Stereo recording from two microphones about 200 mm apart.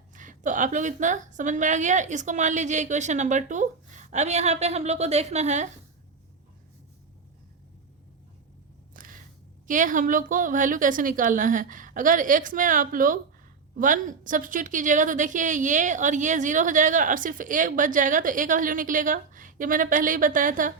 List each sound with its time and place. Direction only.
0.1 s a woman's voice: 40° right (ahead or behind)
8.9 s single-lens reflex camera: 45° right (ahead or behind)
9.6 s a woman's voice: 40° right (ahead or behind)